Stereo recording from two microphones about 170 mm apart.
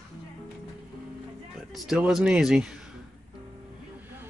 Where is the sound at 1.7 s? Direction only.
5° right (ahead or behind).